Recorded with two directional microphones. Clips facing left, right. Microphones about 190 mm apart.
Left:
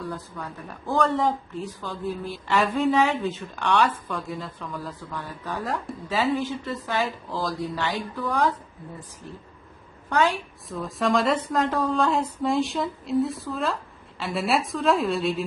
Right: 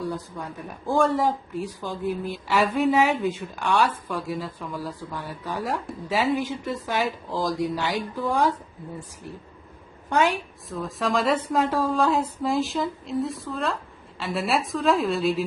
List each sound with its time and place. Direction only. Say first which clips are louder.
0.9 s a woman's voice: right 1 dB; 10° right (ahead or behind)
10.1 s a woman's voice: right 1 dB; 15° right (ahead or behind)
10.7 s speech: left 2 dB; centre (ahead or behind)